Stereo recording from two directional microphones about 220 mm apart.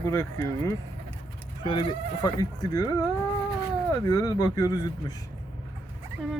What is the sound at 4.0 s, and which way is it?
Speech, 15° left (ahead or behind).